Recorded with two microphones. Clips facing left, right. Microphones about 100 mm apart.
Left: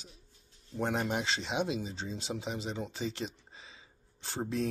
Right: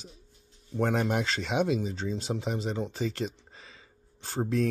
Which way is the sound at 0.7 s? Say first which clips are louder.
Right 5 dB; 50° right (ahead or behind).